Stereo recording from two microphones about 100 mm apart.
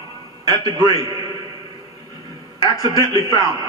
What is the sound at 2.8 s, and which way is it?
Speech, 35° right (ahead or behind).